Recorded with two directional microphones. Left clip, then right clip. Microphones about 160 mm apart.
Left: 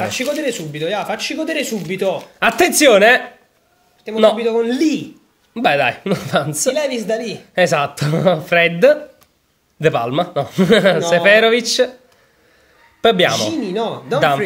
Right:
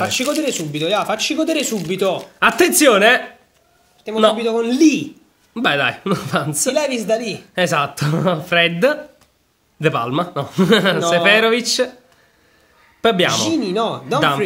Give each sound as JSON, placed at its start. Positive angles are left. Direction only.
{"t": 0.1, "sound": "speech", "side_deg": -35}
{"t": 2.3, "sound": "a man's voice", "side_deg": 0}
{"t": 4.1, "sound": "a man's voice", "side_deg": -25}
{"t": 5.5, "sound": "a man's voice", "side_deg": 0}
{"t": 6.7, "sound": "speech", "side_deg": -40}
{"t": 7.3, "sound": "a man's voice", "side_deg": 5}
{"t": 13.0, "sound": "a man's voice", "side_deg": 0}
{"t": 13.3, "sound": "speech", "side_deg": -40}